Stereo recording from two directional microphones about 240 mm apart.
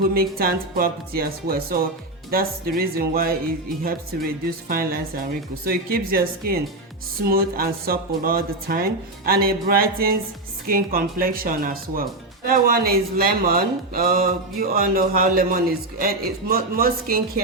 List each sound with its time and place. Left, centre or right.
0.0 s speech: right